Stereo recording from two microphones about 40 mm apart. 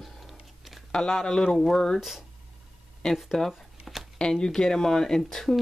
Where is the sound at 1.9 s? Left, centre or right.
Centre.